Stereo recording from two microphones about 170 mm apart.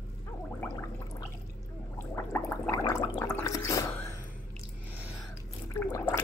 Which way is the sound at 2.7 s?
20° left (ahead or behind).